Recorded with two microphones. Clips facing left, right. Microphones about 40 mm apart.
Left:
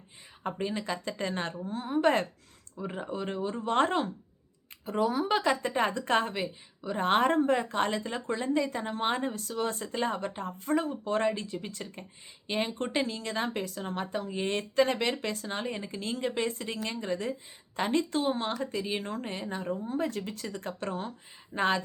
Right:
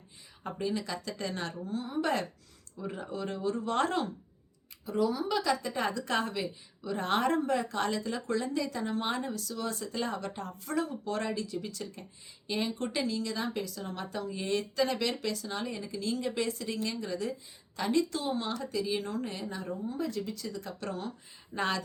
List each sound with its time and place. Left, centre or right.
0.4 s speech: left
4.9 s speech: left